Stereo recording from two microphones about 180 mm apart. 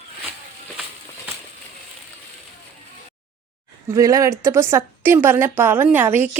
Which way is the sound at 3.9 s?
20° right (ahead or behind).